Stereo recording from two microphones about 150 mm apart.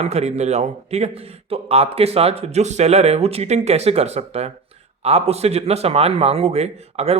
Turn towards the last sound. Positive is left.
turn(degrees=-45)  # may be behind; listen again after turning